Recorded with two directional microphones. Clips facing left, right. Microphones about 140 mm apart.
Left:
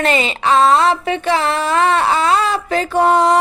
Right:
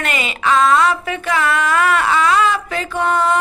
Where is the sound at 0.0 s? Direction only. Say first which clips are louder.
Left 4 dB; 30° left (ahead or behind).